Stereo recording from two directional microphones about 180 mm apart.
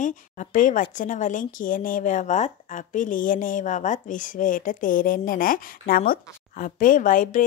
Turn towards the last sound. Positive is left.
turn(degrees=50)  # may be behind; listen again after turning